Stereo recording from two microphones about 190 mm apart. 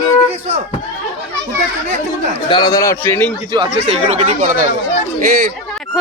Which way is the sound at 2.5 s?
20° left (ahead or behind).